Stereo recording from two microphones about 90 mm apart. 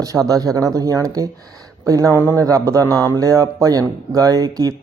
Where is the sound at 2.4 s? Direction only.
35° right (ahead or behind).